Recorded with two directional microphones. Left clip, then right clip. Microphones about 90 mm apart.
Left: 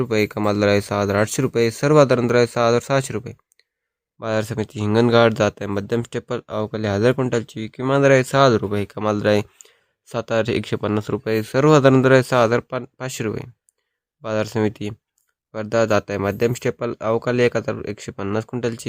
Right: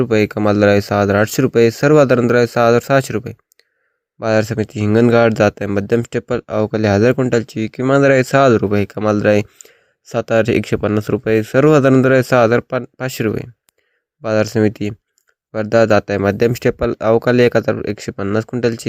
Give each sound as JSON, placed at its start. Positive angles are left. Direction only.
{"t": 0.0, "sound": "speech", "side_deg": -35}
{"t": 6.7, "sound": "speech", "side_deg": -55}
{"t": 7.8, "sound": "speech", "side_deg": -35}